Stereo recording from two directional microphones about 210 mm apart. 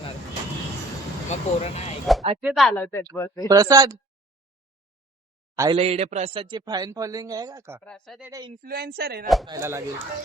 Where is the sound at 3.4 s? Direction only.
15° right (ahead or behind).